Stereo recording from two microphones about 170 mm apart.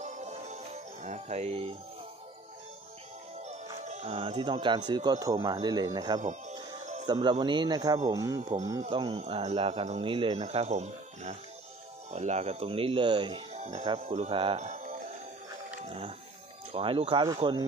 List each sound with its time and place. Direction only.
0.0 s music: 40° right (ahead or behind)
1.0 s speech: 40° right (ahead or behind)
3.8 s speech: 40° right (ahead or behind); by 6.2 s 25° right (ahead or behind)
6.2 s music: 40° right (ahead or behind)
7.1 s speech: 25° right (ahead or behind)
8.4 s speech: 40° right (ahead or behind); by 17.4 s 25° right (ahead or behind)